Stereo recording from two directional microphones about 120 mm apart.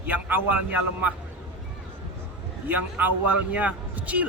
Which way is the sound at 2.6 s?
15° right (ahead or behind).